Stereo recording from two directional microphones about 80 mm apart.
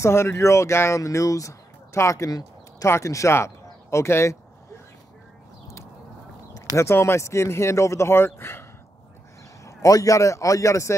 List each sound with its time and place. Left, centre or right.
0.0 s speech: left
6.8 s speech: left
9.7 s speech: left